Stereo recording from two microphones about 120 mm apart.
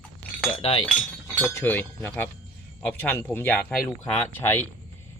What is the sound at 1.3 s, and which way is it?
A man's voice, 20° left (ahead or behind).